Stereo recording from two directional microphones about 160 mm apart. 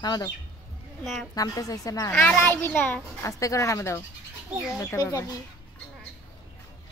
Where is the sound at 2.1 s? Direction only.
5° left (ahead or behind).